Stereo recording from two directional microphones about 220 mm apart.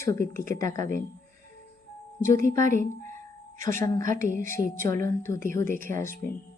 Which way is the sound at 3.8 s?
15° left (ahead or behind).